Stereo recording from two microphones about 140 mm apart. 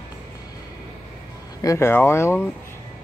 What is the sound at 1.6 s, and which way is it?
Speech, 20° left (ahead or behind).